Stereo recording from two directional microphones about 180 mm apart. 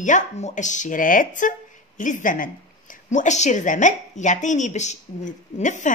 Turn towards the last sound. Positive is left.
turn(degrees=45)  # may be behind; listen again after turning